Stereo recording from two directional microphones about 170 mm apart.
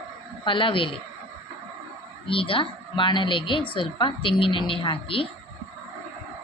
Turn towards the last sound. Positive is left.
turn(degrees=30)  # may be behind; listen again after turning